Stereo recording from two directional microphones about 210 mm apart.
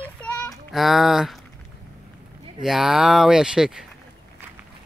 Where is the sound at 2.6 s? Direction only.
Centre (ahead or behind).